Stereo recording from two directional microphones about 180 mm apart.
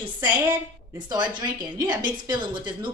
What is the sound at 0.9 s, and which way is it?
A woman's voice, 25° right (ahead or behind).